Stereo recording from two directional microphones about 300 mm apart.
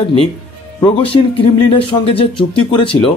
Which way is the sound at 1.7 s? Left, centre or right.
Centre.